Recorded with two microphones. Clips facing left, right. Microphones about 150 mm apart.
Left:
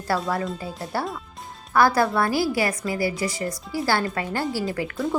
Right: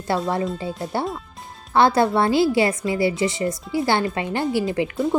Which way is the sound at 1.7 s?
25° right (ahead or behind).